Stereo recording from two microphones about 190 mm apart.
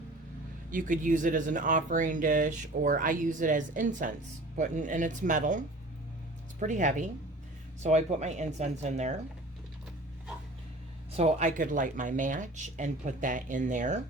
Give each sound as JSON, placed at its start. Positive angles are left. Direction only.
{"t": 0.7, "sound": "speech", "side_deg": -45}
{"t": 6.6, "sound": "speech", "side_deg": -40}
{"t": 11.2, "sound": "speech", "side_deg": -40}